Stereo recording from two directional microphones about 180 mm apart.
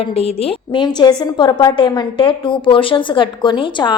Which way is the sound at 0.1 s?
35° left (ahead or behind).